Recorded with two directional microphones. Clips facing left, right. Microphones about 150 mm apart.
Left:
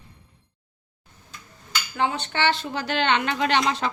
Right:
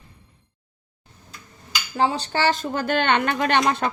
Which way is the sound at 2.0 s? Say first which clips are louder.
Right 3 dB; 35° right (ahead or behind).